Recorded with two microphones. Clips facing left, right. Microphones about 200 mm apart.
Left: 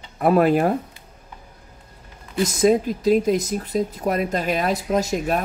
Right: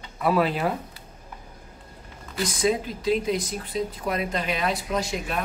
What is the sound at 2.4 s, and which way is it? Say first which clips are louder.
Speech: left 7 dB; 45° left (ahead or behind).